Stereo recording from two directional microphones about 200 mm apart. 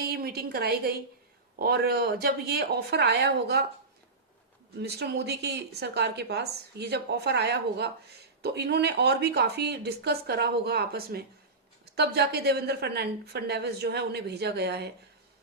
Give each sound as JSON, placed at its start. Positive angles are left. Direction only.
{"t": 0.0, "sound": "a woman's voice", "side_deg": -50}
{"t": 4.8, "sound": "speech", "side_deg": -55}